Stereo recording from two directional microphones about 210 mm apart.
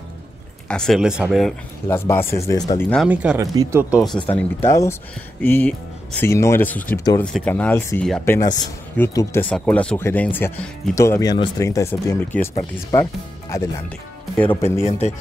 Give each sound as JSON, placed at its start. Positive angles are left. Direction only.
{"t": 0.7, "sound": "speech", "side_deg": 5}
{"t": 1.9, "sound": "speech", "side_deg": 10}
{"t": 2.8, "sound": "speech", "side_deg": 5}
{"t": 3.1, "sound": "speech", "side_deg": -5}
{"t": 4.6, "sound": "speech", "side_deg": 15}
{"t": 14.8, "sound": "speech", "side_deg": 30}